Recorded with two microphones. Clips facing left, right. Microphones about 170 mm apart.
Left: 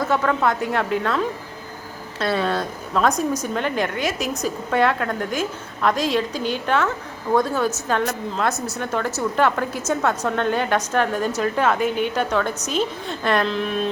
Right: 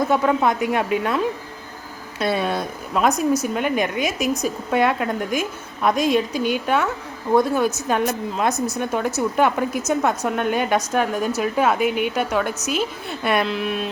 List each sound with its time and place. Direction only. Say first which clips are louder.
0.1 s a woman's voice: right 2 dB; 15° right (ahead or behind)
8.5 s speech: right 5 dB; 5° left (ahead or behind)
8.8 s a woman's voice: even; 15° right (ahead or behind)